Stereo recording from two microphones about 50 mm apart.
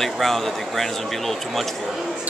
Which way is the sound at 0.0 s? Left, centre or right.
Centre.